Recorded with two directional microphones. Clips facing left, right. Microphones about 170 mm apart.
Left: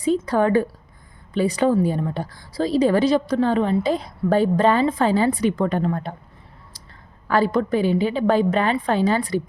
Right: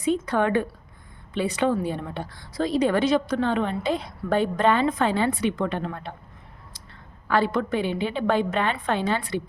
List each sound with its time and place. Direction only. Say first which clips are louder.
0.0 s a sound: left 4 dB; 35° left (ahead or behind)
1.3 s a woman's voice: left 4 dB; 35° left (ahead or behind)
7.3 s a woman's voice: left 4 dB; 40° left (ahead or behind)